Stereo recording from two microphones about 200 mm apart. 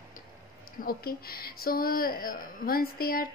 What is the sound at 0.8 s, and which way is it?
A woman's voice, 50° left (ahead or behind).